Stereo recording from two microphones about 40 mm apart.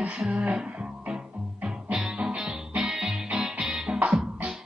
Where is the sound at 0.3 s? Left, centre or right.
Right.